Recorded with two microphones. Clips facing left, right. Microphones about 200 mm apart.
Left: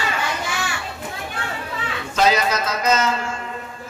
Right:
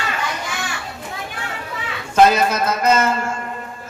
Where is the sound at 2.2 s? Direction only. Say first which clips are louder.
Right 5 dB; 55° right (ahead or behind).